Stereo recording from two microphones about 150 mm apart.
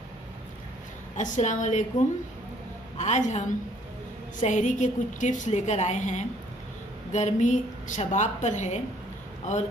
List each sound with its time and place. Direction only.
1.1 s a woman's voice: 55° left (ahead or behind)
3.0 s a woman's voice: 50° left (ahead or behind)